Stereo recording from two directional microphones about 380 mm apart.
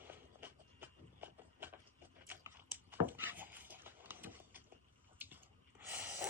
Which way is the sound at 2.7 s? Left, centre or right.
Centre.